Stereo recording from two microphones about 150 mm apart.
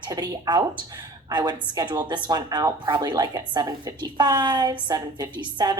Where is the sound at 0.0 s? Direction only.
25° right (ahead or behind).